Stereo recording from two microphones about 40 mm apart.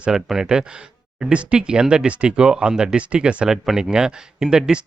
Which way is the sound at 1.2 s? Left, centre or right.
Right.